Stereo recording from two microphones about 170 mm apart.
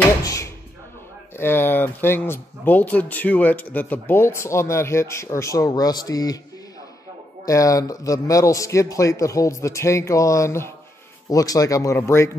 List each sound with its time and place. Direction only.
0.2 s door: 20° left (ahead or behind)
1.3 s speech: 15° left (ahead or behind)
7.4 s speech: 20° left (ahead or behind)